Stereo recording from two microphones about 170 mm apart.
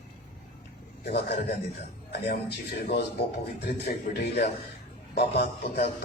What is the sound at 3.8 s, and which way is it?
A man's voice, 70° left (ahead or behind).